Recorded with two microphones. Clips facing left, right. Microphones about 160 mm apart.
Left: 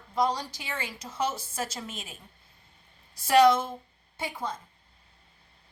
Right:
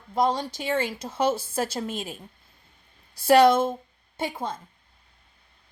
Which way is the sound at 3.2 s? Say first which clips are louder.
Right 3 dB; 30° right (ahead or behind).